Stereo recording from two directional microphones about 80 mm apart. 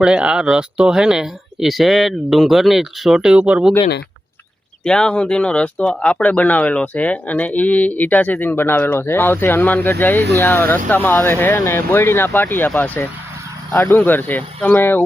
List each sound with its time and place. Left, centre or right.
0.0 s speech: centre
4.8 s speech: centre; by 15.0 s left